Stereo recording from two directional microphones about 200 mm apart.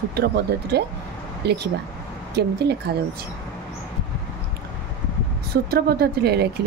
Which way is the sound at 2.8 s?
55° right (ahead or behind).